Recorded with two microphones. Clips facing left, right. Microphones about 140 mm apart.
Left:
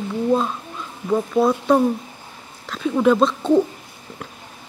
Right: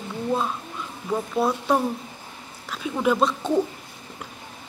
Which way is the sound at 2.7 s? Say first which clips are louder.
Left 6 dB; 10° right (ahead or behind).